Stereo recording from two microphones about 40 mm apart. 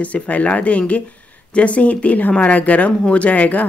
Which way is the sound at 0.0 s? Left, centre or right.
Left.